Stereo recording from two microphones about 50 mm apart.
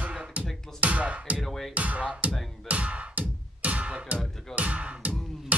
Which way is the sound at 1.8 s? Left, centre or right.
Right.